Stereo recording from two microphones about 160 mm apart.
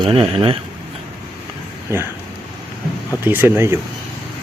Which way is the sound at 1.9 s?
15° right (ahead or behind).